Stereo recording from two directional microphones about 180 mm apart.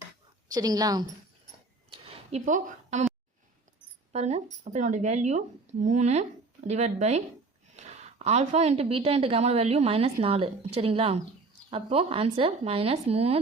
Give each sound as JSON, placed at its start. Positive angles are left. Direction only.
{"t": 0.5, "sound": "a woman's voice", "side_deg": -20}
{"t": 1.9, "sound": "a sound", "side_deg": -30}
{"t": 2.4, "sound": "a woman's voice", "side_deg": -45}
{"t": 4.1, "sound": "a woman's voice", "side_deg": -40}